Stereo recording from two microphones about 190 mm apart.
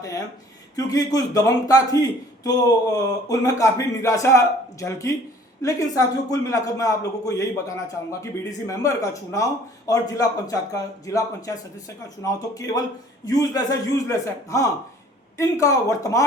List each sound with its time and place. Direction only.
0.8 s a man's voice: 20° left (ahead or behind)